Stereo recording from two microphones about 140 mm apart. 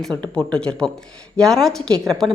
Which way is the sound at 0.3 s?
5° left (ahead or behind).